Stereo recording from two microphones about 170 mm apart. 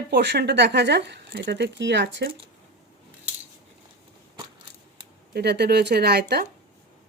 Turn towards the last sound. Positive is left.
turn(degrees=-70)  # may be behind; listen again after turning